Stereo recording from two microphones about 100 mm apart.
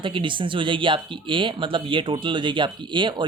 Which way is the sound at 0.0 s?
55° right (ahead or behind).